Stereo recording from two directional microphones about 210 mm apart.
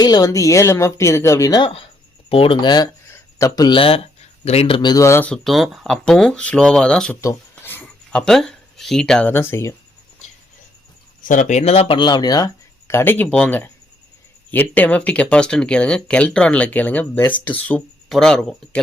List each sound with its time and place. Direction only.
0.0 s speech: 20° left (ahead or behind)
11.2 s speech: 40° left (ahead or behind); by 18.8 s 5° left (ahead or behind)